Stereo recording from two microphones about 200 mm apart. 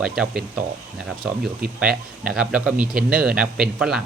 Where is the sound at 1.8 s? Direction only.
5° right (ahead or behind).